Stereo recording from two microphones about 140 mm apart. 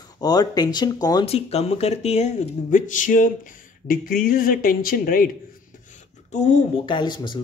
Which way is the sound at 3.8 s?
85° left.